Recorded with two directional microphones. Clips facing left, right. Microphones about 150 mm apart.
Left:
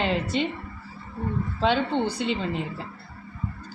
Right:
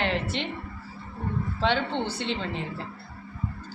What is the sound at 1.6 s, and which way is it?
Speech, 10° left (ahead or behind).